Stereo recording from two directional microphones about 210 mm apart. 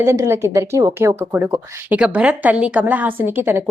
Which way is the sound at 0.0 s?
10° right (ahead or behind).